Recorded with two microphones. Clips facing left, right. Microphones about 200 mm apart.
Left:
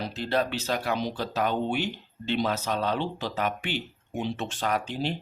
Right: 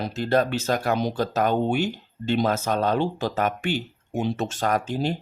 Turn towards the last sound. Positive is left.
turn(degrees=-45)  # may be behind; listen again after turning